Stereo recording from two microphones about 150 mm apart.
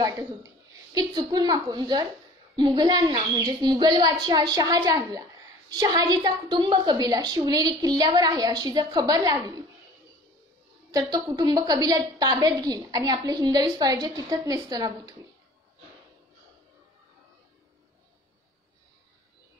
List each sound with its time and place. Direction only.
0.0 s a woman's voice: 25° right (ahead or behind)
10.9 s a woman's voice: 25° right (ahead or behind)